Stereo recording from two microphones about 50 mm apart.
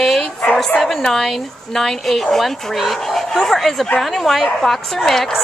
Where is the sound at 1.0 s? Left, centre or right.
Centre.